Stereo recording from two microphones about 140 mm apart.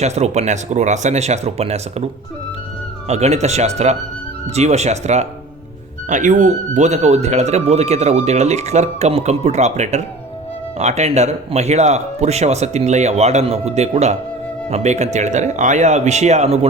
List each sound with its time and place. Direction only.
0.0 s speech: 50° right (ahead or behind)
3.1 s speech: 50° right (ahead or behind)